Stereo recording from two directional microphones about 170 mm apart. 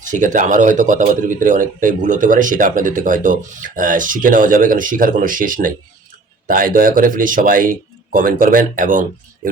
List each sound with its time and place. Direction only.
0.0 s speech: 50° right (ahead or behind)